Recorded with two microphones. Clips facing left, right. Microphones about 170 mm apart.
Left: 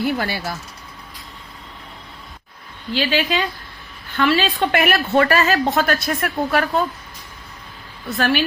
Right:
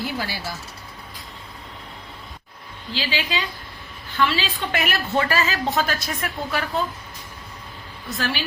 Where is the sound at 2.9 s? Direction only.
55° left (ahead or behind).